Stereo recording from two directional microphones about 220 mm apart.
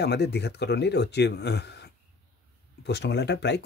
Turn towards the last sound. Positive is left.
turn(degrees=50)  # may be behind; listen again after turning